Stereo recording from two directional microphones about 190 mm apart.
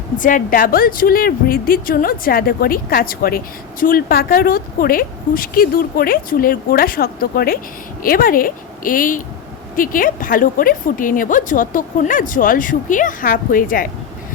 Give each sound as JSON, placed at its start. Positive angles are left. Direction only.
{"t": 0.2, "sound": "a woman's voice", "side_deg": 45}